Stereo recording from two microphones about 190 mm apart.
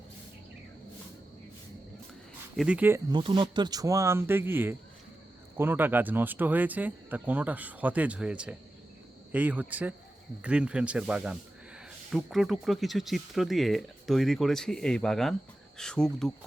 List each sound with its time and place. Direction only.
2.6 s speech: 5° right (ahead or behind)
3.1 s speech: 25° right (ahead or behind); by 16.3 s 5° left (ahead or behind)